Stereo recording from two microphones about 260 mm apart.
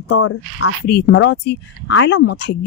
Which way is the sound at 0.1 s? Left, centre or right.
Left.